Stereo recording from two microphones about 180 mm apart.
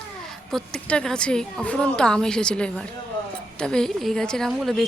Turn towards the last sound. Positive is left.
turn(degrees=0)  # may be behind; listen again after turning